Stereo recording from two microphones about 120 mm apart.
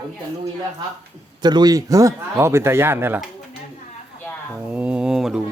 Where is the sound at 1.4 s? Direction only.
35° right (ahead or behind); by 3.2 s 20° right (ahead or behind).